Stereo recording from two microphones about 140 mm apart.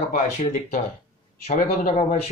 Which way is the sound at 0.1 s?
65° left (ahead or behind).